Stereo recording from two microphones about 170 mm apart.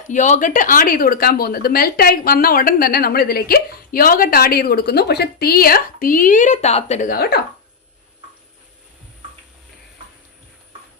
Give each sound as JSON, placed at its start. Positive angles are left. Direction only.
{"t": 0.1, "sound": "speech", "side_deg": 45}
{"t": 7.1, "sound": "speech", "side_deg": 65}